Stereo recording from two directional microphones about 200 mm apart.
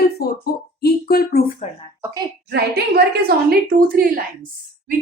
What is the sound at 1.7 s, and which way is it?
Speech, 35° left (ahead or behind).